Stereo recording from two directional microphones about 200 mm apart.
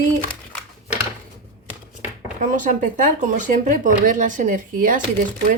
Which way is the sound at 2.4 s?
40° right (ahead or behind).